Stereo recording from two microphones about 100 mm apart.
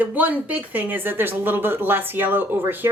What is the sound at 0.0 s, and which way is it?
Speech, 15° right (ahead or behind).